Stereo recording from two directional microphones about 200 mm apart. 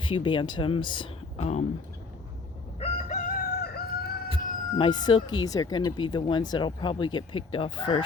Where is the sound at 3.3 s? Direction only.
50° left (ahead or behind).